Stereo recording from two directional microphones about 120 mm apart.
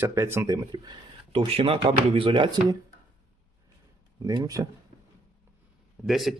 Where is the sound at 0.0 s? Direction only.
20° right (ahead or behind); by 2.7 s 45° right (ahead or behind).